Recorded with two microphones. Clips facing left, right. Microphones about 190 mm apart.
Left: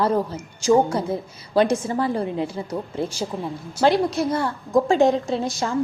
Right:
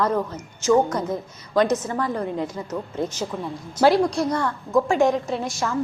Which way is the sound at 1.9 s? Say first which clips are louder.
Left 2 dB; 30° left (ahead or behind).